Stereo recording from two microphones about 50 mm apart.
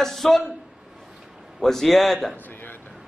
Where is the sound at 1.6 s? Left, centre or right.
Centre.